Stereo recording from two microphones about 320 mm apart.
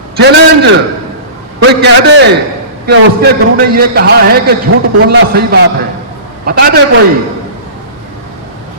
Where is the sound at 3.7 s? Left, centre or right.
Right.